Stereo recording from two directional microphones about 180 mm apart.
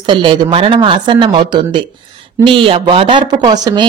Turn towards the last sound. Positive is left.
turn(degrees=-20)  # may be behind; listen again after turning